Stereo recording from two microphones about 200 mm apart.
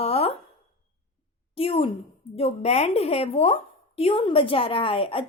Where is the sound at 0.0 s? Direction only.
30° left (ahead or behind).